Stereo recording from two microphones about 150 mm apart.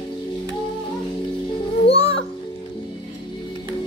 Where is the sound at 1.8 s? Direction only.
40° left (ahead or behind).